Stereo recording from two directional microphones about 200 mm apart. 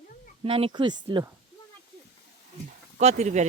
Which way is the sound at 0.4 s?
25° right (ahead or behind).